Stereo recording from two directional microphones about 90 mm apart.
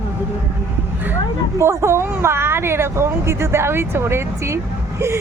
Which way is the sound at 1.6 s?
30° right (ahead or behind).